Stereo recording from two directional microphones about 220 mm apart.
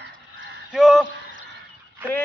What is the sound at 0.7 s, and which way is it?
Speech, centre (ahead or behind).